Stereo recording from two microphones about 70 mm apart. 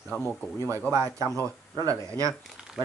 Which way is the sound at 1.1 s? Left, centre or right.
Right.